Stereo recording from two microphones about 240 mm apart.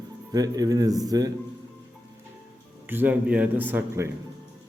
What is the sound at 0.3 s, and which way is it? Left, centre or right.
Speech, centre.